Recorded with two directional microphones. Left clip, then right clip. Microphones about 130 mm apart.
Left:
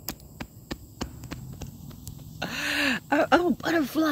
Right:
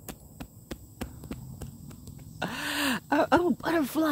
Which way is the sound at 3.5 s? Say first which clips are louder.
Left 2 dB; 20° right (ahead or behind).